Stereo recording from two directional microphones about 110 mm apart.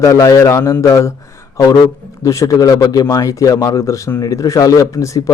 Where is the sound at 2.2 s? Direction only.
30° left (ahead or behind).